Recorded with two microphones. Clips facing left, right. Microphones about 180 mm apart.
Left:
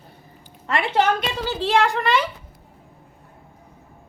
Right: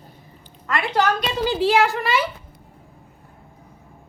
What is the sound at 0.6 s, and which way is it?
Speech, 25° left (ahead or behind).